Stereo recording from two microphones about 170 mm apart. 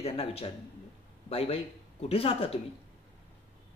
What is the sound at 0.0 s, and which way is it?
Speech, 35° left (ahead or behind).